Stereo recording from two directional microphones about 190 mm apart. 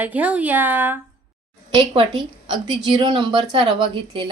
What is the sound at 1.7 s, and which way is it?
A woman's voice, 25° right (ahead or behind).